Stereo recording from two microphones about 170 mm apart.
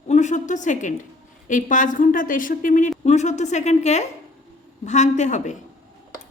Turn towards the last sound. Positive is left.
turn(degrees=45)  # may be behind; listen again after turning